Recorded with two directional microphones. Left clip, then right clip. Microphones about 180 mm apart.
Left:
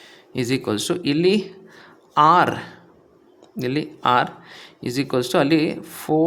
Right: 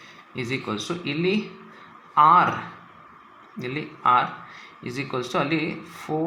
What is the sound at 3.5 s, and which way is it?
Speech, 55° left (ahead or behind).